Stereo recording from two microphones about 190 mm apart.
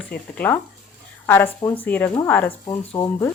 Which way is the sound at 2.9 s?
20° left (ahead or behind).